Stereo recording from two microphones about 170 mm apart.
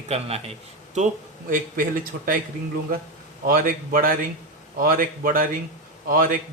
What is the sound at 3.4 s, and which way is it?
Speech, 55° right (ahead or behind).